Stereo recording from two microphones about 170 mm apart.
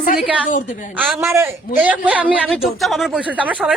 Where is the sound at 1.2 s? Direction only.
15° right (ahead or behind).